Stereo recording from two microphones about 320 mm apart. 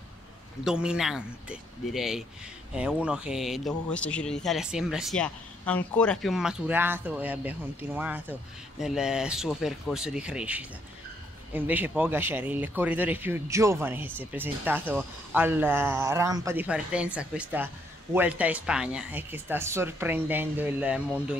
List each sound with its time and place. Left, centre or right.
0.7 s speech: centre